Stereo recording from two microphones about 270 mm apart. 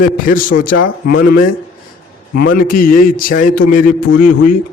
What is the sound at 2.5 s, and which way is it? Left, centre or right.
Speech, left.